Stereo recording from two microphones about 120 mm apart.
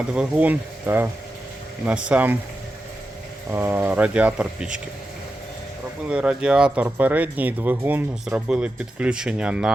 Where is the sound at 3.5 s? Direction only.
20° right (ahead or behind).